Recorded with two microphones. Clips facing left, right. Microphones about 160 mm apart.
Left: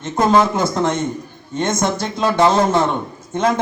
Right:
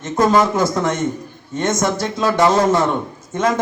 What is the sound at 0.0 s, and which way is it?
A man's voice, 30° left (ahead or behind).